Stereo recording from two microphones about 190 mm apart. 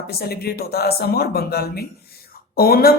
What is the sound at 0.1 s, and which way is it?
Speech, 55° left (ahead or behind).